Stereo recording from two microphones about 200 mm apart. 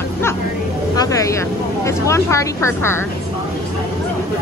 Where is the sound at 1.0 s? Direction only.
15° left (ahead or behind).